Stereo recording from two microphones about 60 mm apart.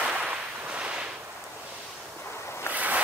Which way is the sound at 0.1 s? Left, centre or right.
Right.